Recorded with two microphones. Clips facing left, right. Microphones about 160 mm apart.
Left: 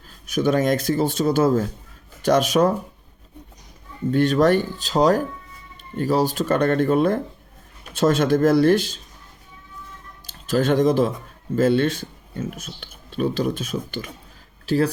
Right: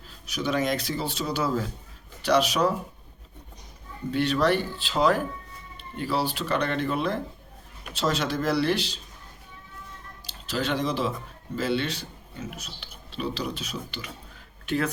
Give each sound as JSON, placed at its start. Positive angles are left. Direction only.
{"t": 0.1, "sound": "speech", "side_deg": 50}
{"t": 4.1, "sound": "speech", "side_deg": 45}
{"t": 10.2, "sound": "speech", "side_deg": 50}
{"t": 14.7, "sound": "speech", "side_deg": 35}